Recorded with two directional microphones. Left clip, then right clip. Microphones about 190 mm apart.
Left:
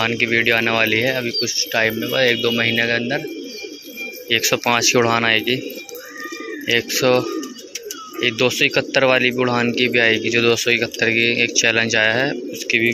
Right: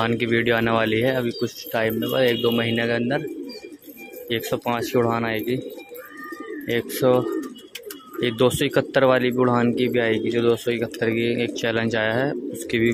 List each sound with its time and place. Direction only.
0.0 s speech: 20° right (ahead or behind)
4.5 s speech: 5° right (ahead or behind)
6.7 s speech: 10° right (ahead or behind)
8.2 s speech: 25° right (ahead or behind)